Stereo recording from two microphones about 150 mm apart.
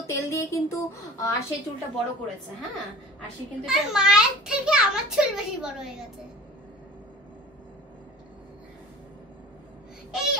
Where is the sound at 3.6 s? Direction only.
5° right (ahead or behind).